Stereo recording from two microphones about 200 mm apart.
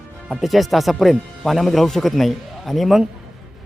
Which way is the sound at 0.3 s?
Centre (ahead or behind).